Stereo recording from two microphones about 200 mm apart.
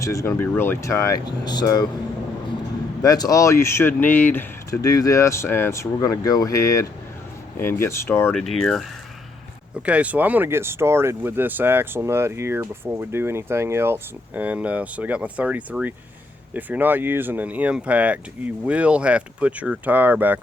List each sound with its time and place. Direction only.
0.0 s speech: 15° left (ahead or behind)
3.0 s speech: 15° left (ahead or behind); by 8.8 s centre (ahead or behind)
9.8 s speech: 5° right (ahead or behind)